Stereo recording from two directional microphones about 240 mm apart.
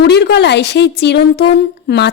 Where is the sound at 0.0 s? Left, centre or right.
Left.